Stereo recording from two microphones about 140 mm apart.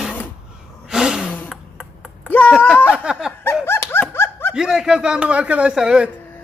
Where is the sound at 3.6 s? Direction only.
15° left (ahead or behind).